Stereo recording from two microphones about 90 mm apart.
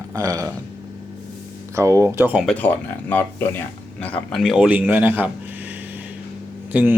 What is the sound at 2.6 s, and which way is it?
Speech, 20° left (ahead or behind).